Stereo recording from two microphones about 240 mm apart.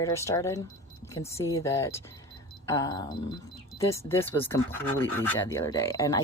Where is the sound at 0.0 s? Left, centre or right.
Centre.